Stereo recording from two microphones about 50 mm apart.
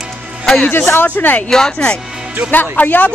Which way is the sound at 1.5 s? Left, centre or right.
Centre.